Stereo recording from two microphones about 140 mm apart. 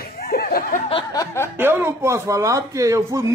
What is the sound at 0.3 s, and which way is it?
Chuckle, 90° left.